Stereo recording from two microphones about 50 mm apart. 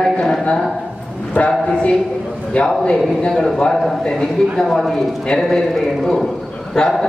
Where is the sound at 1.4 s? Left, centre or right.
Left.